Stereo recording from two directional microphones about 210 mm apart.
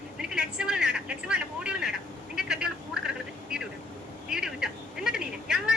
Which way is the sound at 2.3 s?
5° right (ahead or behind).